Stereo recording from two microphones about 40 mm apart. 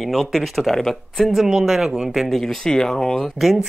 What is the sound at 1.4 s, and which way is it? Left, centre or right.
Speech, centre.